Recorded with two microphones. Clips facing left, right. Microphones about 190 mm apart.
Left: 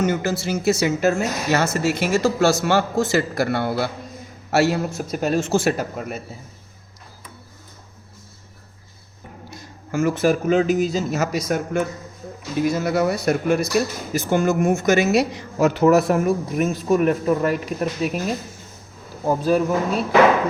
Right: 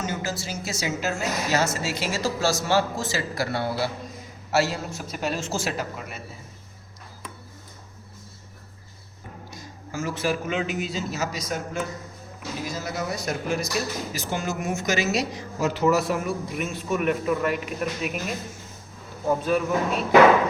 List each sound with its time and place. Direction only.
0.0 s a woman's voice: 60° left (ahead or behind)
4.9 s speech: 45° left (ahead or behind)
9.5 s a man's voice: 60° left (ahead or behind); by 11.2 s 40° left (ahead or behind)
11.2 s a woman's voice: 60° left (ahead or behind); by 18.2 s 35° left (ahead or behind)
19.4 s speech: 35° left (ahead or behind)